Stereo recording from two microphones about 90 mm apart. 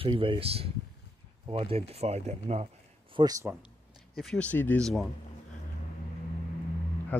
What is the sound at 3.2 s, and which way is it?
Speech, 65° right (ahead or behind).